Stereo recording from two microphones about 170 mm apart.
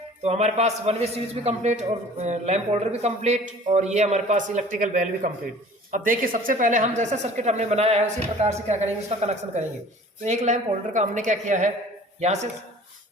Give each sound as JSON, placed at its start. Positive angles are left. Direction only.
{"t": 0.2, "sound": "a man's voice", "side_deg": -40}